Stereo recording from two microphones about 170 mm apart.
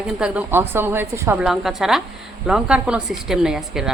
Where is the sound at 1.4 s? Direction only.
Centre (ahead or behind).